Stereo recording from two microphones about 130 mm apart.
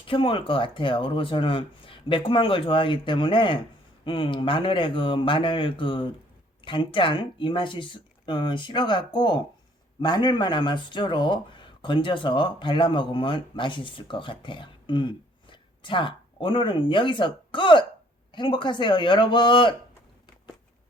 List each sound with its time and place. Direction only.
0.1 s speech: 40° left (ahead or behind)